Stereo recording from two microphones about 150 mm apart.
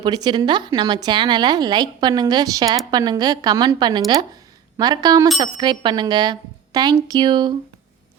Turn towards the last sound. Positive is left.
turn(degrees=-30)  # may be behind; listen again after turning